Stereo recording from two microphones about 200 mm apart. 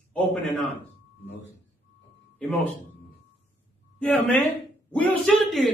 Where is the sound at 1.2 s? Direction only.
65° left (ahead or behind).